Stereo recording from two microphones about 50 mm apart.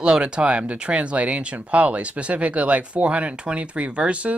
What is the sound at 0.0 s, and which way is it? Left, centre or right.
Speech, centre.